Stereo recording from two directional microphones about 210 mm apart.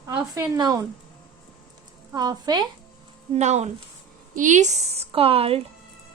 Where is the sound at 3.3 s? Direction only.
30° right (ahead or behind).